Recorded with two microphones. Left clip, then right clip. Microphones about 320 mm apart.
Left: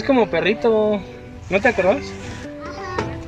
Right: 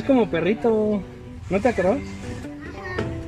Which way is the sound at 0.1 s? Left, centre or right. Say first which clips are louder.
Left 3 dB; left.